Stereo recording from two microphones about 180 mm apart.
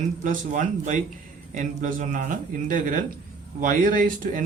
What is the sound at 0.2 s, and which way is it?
Speech, 45° right (ahead or behind).